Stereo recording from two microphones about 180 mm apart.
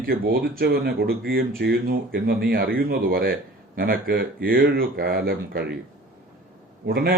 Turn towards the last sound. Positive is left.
turn(degrees=-60)  # may be behind; listen again after turning